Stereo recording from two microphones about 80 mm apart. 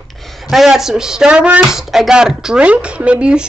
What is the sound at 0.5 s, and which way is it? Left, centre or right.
Speech, centre.